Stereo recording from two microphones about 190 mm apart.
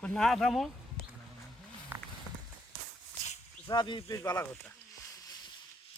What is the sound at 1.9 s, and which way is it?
Walk, 10° right (ahead or behind).